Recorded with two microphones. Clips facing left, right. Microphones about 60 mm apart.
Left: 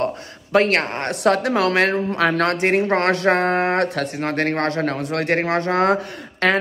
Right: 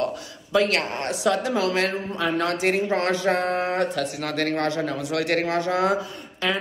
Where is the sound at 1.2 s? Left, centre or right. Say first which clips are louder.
Left 5 dB; left.